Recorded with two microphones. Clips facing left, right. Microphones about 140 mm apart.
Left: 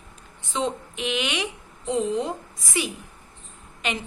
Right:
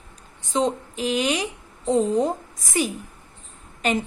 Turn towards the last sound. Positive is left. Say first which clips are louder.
# right 6 dB
turn(degrees=-45)  # may be behind; listen again after turning